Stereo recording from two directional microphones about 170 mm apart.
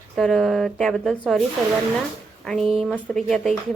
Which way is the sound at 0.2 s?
Centre (ahead or behind).